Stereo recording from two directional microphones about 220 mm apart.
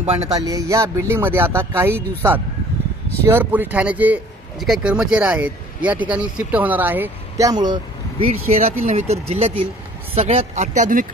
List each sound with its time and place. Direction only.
0.0 s speech: 30° right (ahead or behind)
0.3 s a man's voice: 15° right (ahead or behind); by 11.1 s 35° right (ahead or behind)